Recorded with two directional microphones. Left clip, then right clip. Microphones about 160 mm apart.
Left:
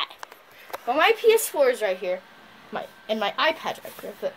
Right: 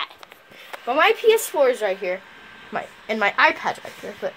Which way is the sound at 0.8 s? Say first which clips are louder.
Right 2 dB; 40° right (ahead or behind).